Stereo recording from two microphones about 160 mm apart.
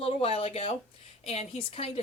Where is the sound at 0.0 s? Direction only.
35° left (ahead or behind).